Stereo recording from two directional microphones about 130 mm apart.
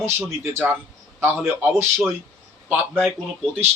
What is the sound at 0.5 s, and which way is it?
Speech, 20° right (ahead or behind).